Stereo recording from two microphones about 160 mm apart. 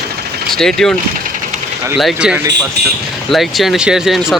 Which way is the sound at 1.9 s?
5° right (ahead or behind).